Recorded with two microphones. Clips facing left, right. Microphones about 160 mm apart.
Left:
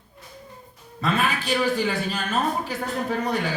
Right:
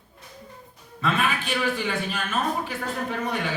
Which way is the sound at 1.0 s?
35° left (ahead or behind).